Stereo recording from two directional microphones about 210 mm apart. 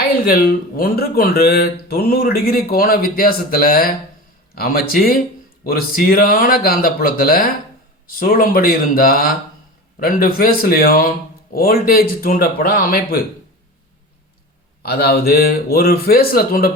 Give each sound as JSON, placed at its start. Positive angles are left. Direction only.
{"t": 0.3, "sound": "speech", "side_deg": 45}
{"t": 14.8, "sound": "speech", "side_deg": 45}